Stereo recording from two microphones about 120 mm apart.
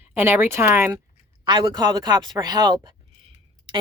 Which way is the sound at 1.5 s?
40° right (ahead or behind).